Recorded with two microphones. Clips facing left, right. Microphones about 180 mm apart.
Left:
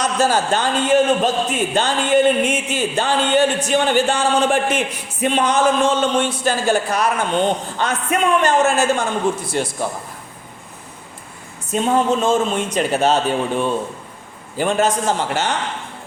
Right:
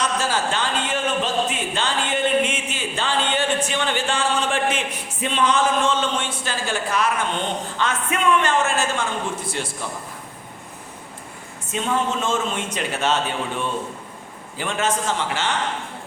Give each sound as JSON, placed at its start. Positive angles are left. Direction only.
{"t": 0.0, "sound": "a man's voice", "side_deg": 40}
{"t": 11.7, "sound": "a man's voice", "side_deg": 35}